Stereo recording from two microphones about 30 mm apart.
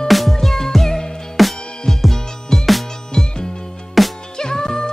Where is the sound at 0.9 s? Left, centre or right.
Centre.